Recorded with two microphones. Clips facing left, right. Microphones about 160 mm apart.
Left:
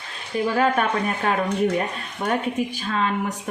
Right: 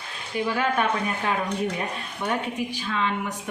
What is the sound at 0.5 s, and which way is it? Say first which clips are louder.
Speech: left 4 dB; 40° left (ahead or behind).